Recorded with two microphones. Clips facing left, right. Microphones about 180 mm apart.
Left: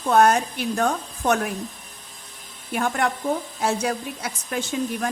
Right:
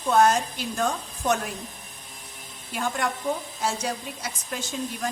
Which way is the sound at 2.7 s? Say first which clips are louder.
Left 4 dB; 60° left (ahead or behind).